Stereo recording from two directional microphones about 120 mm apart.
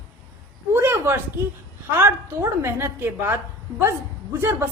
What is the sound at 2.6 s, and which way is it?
A woman's voice, 20° right (ahead or behind).